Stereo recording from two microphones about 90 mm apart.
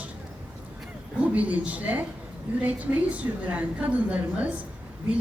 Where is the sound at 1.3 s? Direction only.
15° right (ahead or behind).